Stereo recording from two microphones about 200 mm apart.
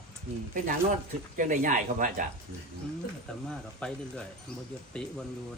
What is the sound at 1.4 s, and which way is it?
Speech, 40° right (ahead or behind).